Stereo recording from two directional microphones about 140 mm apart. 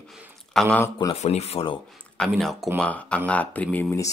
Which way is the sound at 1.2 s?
50° left (ahead or behind).